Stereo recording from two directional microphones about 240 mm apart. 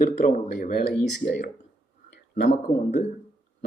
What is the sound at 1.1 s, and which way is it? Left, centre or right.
Speech, left.